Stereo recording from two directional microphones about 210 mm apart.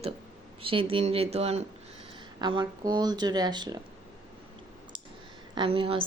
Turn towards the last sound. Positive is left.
turn(degrees=-25)  # may be behind; listen again after turning